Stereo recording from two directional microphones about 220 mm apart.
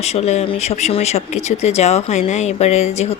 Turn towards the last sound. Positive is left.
turn(degrees=30)  # may be behind; listen again after turning